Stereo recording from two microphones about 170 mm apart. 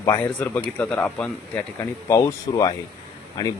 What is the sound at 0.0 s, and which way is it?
Speech, 10° left (ahead or behind).